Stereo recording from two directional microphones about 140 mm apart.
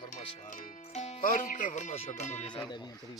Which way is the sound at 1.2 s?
75° left (ahead or behind).